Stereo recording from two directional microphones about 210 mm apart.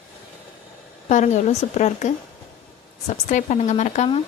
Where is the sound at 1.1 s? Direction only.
35° left (ahead or behind).